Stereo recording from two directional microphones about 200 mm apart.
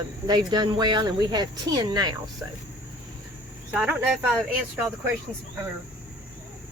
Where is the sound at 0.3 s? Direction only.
20° right (ahead or behind).